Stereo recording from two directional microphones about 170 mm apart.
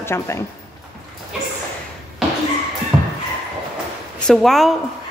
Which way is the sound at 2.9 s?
15° right (ahead or behind).